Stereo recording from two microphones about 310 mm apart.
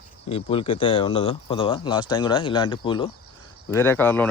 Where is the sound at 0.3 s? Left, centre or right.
Centre.